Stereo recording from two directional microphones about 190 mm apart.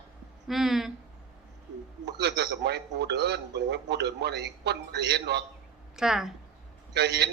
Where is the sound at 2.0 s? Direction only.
65° right (ahead or behind).